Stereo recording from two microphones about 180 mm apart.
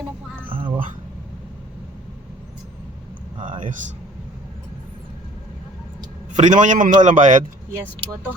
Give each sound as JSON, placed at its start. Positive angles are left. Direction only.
{"t": 6.3, "sound": "a man's voice", "side_deg": -45}